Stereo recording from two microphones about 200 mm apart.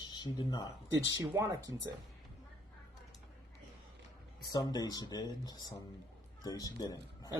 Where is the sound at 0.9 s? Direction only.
15° right (ahead or behind).